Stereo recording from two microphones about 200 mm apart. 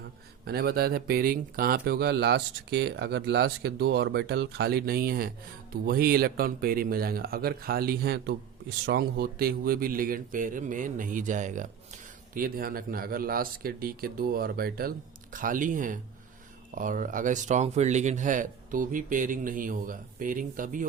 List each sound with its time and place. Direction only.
0.4 s speech: 50° right (ahead or behind)